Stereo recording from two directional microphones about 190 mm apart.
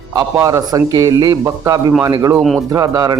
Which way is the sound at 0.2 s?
15° right (ahead or behind).